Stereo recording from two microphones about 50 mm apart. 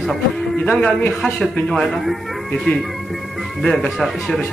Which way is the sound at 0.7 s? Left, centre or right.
Centre.